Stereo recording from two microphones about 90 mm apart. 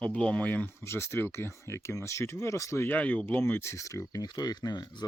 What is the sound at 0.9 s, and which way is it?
Speech, 30° left (ahead or behind).